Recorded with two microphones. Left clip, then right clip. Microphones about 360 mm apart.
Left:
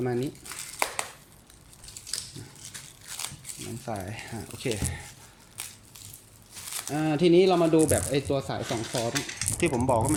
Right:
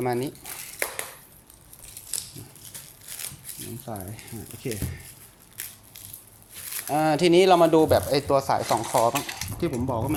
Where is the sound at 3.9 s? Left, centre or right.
Centre.